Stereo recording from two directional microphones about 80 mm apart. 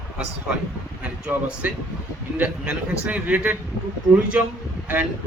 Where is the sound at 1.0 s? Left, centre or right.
Centre.